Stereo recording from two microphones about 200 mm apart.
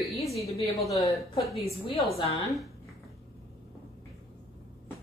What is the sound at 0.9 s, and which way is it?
Speech, 15° left (ahead or behind).